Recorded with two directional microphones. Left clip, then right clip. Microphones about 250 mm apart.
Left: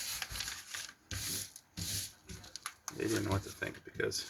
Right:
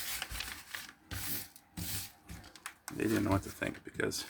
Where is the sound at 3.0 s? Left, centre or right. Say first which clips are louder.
Right 3 dB; right.